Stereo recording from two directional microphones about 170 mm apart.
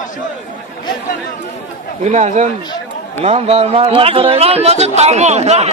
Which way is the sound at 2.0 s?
45° right (ahead or behind).